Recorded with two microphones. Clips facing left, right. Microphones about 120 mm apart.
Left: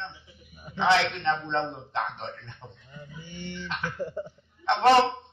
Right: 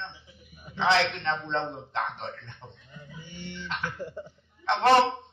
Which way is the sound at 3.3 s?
45° left (ahead or behind).